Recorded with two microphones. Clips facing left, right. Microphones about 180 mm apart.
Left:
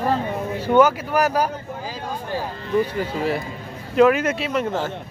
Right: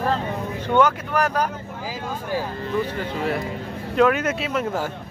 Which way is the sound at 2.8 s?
5° left (ahead or behind).